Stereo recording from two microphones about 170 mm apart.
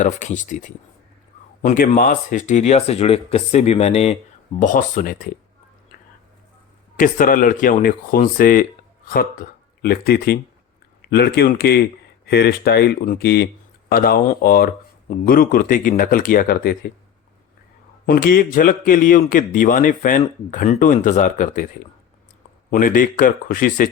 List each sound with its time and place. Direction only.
0.0 s speech: 45° left (ahead or behind)
1.6 s speech: 55° left (ahead or behind); by 4.2 s 40° left (ahead or behind)
4.6 s speech: 50° left (ahead or behind)
6.9 s speech: 50° left (ahead or behind); by 13.5 s 70° left (ahead or behind)
13.9 s speech: 60° left (ahead or behind)
18.0 s speech: 65° left (ahead or behind)
22.7 s speech: 55° left (ahead or behind)